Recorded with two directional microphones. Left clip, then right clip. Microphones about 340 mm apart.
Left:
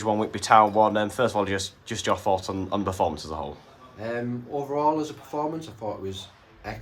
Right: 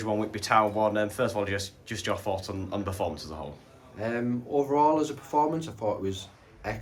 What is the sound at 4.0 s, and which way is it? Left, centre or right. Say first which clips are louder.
Speech: even; centre.